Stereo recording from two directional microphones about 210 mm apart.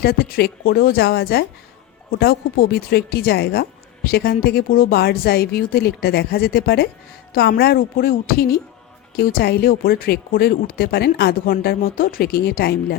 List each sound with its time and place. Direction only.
0.0 s speech: 45° left (ahead or behind)